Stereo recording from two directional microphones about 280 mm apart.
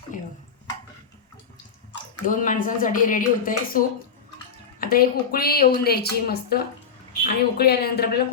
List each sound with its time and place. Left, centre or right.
2.2 s a woman's voice: left